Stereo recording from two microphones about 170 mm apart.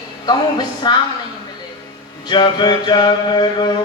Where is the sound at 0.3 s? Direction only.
25° left (ahead or behind).